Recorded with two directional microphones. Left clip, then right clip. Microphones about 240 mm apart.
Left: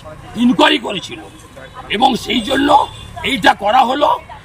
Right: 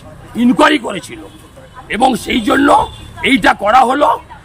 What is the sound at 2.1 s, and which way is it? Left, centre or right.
Speech, right.